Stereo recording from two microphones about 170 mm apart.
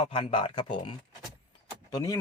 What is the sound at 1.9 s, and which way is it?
Speech, 20° left (ahead or behind).